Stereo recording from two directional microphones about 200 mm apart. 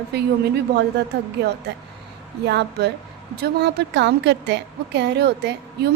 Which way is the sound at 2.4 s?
55° right (ahead or behind).